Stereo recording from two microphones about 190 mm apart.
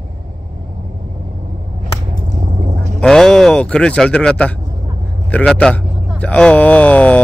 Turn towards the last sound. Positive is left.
turn(degrees=5)  # may be behind; listen again after turning